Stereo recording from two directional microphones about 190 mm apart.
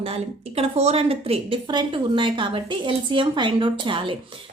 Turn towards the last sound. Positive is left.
turn(degrees=-25)  # may be behind; listen again after turning